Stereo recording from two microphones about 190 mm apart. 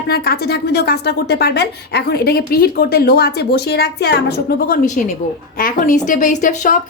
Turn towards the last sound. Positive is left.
turn(degrees=45)  # may be behind; listen again after turning